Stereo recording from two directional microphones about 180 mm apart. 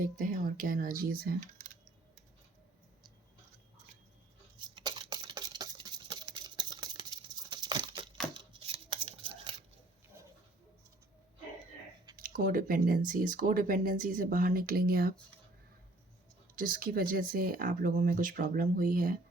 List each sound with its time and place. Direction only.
0.0 s speech: 50° right (ahead or behind)
1.4 s typing: 45° right (ahead or behind)
4.5 s a sound: 25° right (ahead or behind)
12.1 s speech: 50° right (ahead or behind)
16.6 s speech: 50° right (ahead or behind)